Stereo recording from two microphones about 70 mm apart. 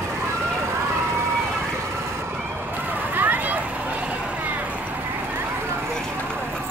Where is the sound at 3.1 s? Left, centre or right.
Right.